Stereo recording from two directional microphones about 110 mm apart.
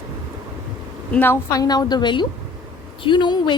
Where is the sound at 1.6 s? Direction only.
35° left (ahead or behind).